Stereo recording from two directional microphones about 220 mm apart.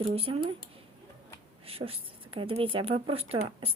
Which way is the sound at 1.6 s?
25° right (ahead or behind).